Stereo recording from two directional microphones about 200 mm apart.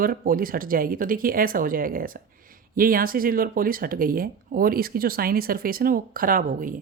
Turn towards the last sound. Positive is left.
turn(degrees=-45)  # may be behind; listen again after turning